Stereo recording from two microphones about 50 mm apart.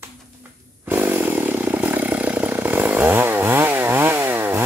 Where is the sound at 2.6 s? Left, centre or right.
Right.